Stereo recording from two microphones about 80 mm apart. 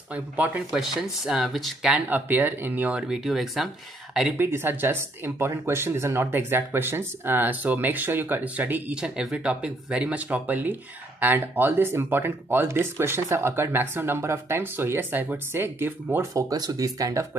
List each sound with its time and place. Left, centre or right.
0.1 s speech: centre
0.7 s speech: centre
2.0 s speech: right
3.3 s speech: centre
4.4 s speech: right
8.9 s speech: centre; by 16.3 s right
16.3 s speech: right